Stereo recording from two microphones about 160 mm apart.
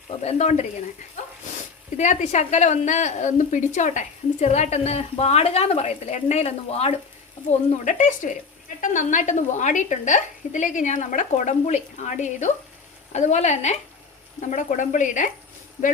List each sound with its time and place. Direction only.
0.2 s speech: 45° left (ahead or behind)
7.9 s speech: 50° left (ahead or behind)